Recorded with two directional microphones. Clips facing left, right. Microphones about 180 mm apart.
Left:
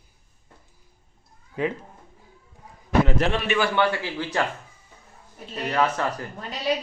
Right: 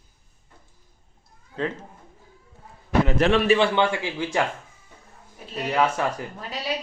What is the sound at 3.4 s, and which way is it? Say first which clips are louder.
Speech: right 3 dB; 25° right (ahead or behind).